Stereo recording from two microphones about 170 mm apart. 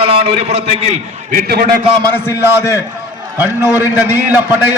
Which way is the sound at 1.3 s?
65° right (ahead or behind).